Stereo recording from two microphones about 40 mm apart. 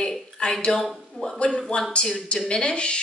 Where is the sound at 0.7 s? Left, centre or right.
Centre.